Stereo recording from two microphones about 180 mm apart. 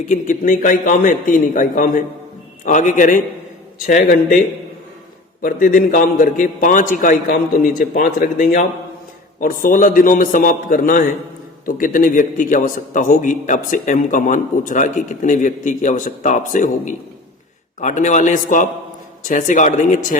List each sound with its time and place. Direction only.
0.0 s a man's voice: 45° left (ahead or behind)
5.4 s a man's voice: 50° left (ahead or behind)